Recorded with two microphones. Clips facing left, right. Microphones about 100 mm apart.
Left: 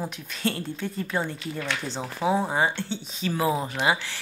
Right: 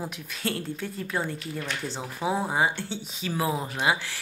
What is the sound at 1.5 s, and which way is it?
Speech, 90° left.